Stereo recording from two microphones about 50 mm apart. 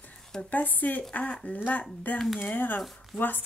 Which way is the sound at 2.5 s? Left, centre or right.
Left.